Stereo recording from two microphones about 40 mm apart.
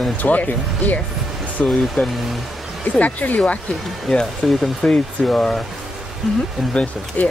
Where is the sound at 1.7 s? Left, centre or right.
Centre.